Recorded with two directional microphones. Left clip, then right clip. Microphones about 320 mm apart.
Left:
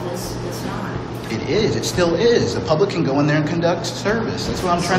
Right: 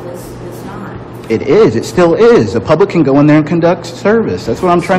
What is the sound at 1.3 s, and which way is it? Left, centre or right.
A man's voice, centre.